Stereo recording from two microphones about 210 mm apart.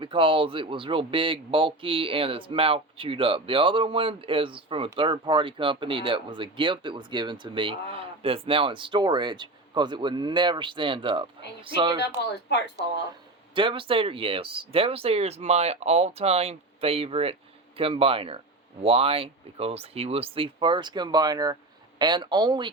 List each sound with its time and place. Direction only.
0.0 s speech: 25° right (ahead or behind)
11.9 s speech: 55° left (ahead or behind)
13.5 s speech: 25° right (ahead or behind)